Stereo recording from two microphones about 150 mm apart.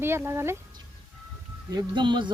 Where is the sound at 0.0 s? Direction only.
15° right (ahead or behind).